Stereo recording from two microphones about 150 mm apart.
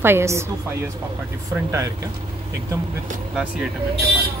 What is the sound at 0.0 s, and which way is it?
Speech, 15° right (ahead or behind).